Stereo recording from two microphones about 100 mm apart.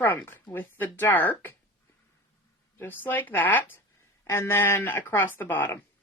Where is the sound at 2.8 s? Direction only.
20° left (ahead or behind).